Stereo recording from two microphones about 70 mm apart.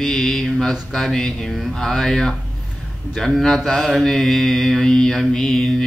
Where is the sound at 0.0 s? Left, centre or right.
Centre.